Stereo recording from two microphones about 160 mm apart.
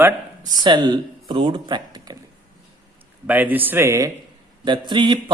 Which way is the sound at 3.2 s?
10° right (ahead or behind).